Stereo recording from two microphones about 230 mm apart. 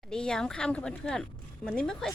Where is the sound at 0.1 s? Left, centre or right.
Centre.